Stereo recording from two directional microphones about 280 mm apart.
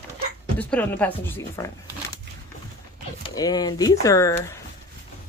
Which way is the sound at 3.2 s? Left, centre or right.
Centre.